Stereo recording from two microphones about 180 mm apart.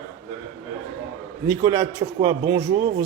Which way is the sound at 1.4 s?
15° right (ahead or behind).